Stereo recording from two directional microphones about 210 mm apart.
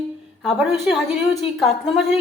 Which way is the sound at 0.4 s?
Centre (ahead or behind).